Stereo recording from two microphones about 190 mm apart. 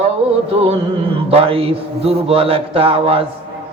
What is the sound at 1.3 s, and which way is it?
Speech, 30° right (ahead or behind).